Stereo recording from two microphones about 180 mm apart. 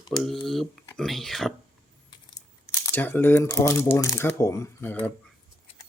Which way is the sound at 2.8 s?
10° left (ahead or behind).